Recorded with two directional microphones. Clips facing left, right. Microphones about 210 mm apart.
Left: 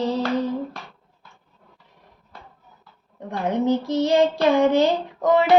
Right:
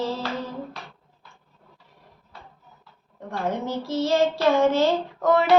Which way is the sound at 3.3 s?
20° left (ahead or behind).